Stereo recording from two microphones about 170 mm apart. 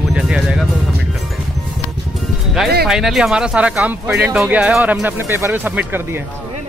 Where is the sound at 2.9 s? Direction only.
Centre (ahead or behind).